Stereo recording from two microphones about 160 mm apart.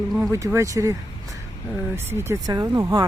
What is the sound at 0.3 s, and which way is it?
Speech, 20° right (ahead or behind).